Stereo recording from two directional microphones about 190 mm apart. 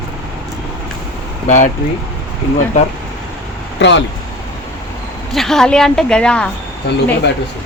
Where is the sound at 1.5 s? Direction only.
40° left (ahead or behind).